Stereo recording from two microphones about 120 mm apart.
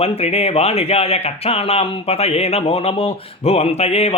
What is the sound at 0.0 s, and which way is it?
Speech, 60° left (ahead or behind).